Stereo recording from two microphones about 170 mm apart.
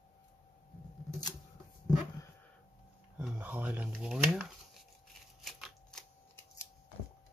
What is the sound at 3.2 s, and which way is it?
Speech, 10° right (ahead or behind).